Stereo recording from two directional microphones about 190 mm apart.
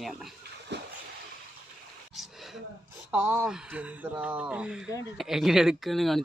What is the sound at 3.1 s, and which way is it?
Speech, 10° right (ahead or behind).